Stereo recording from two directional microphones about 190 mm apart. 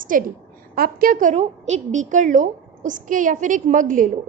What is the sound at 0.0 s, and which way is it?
A woman's voice, 45° right (ahead or behind).